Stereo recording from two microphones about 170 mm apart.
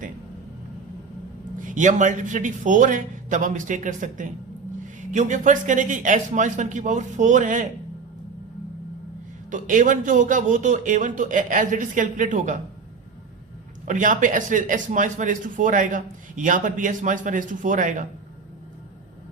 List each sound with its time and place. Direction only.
1.6 s speech: 45° right (ahead or behind)
9.5 s speech: 50° right (ahead or behind)
13.8 s speech: 50° right (ahead or behind)